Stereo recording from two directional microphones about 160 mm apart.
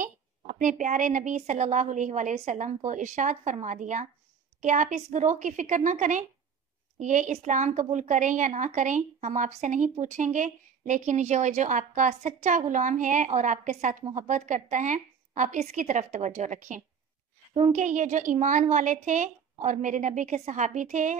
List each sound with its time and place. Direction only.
0.0 s a woman's voice: 55° right (ahead or behind)